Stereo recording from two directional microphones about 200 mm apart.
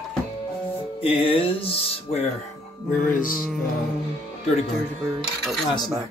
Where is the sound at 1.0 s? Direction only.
25° left (ahead or behind).